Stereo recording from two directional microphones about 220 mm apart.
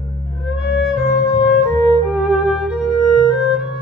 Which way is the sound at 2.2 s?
Centre (ahead or behind).